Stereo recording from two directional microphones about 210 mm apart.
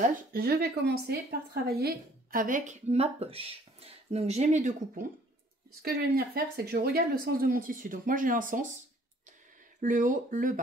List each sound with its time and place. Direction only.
0.0 s a woman's voice: 45° right (ahead or behind)
5.8 s speech: 50° right (ahead or behind)
9.8 s a woman's voice: 40° right (ahead or behind)